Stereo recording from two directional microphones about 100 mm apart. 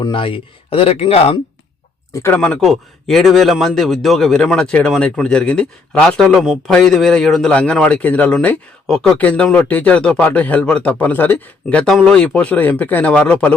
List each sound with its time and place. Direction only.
0.1 s speech: 60° left (ahead or behind)
2.3 s speech: 10° left (ahead or behind)
2.6 s a man's voice: centre (ahead or behind)
11.9 s speech: 5° left (ahead or behind)